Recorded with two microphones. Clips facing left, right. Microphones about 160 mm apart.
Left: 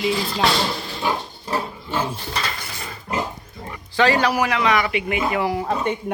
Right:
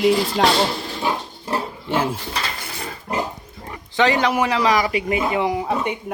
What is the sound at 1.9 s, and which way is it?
Dishes, 90° right.